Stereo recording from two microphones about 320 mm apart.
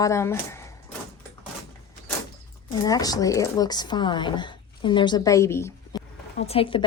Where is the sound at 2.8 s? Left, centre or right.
Centre.